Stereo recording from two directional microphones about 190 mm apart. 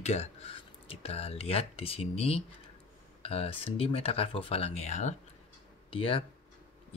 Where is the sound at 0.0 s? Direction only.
35° left (ahead or behind).